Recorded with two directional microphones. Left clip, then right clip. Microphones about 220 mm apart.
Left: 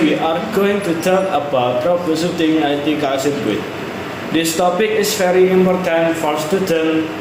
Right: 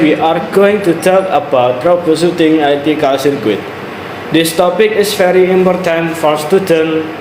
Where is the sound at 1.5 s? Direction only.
35° right (ahead or behind).